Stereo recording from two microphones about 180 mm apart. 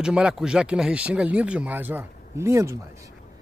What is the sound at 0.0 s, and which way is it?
Speech, 5° right (ahead or behind).